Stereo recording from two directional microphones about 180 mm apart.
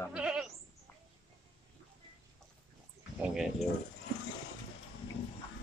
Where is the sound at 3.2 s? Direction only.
5° right (ahead or behind).